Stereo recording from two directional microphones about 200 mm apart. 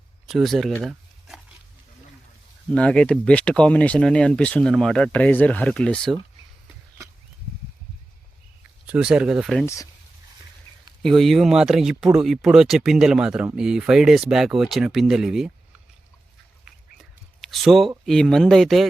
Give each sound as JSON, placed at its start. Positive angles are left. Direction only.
{"t": 0.3, "sound": "a sound", "side_deg": 0}
{"t": 2.6, "sound": "speech", "side_deg": 5}
{"t": 8.9, "sound": "speech", "side_deg": -5}
{"t": 9.6, "sound": "speech", "side_deg": 15}
{"t": 11.0, "sound": "speech", "side_deg": 0}
{"t": 16.6, "sound": "a sound", "side_deg": 0}
{"t": 18.0, "sound": "speech", "side_deg": 0}